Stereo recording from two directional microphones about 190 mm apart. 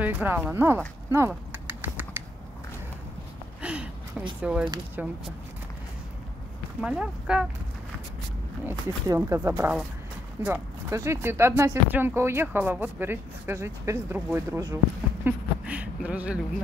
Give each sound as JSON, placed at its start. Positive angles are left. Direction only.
{"t": 0.0, "sound": "speech", "side_deg": -10}
{"t": 3.6, "sound": "a sound", "side_deg": -5}
{"t": 4.4, "sound": "speech", "side_deg": -5}
{"t": 6.8, "sound": "speech", "side_deg": -5}
{"t": 8.6, "sound": "speech", "side_deg": -15}
{"t": 15.2, "sound": "a sound", "side_deg": -5}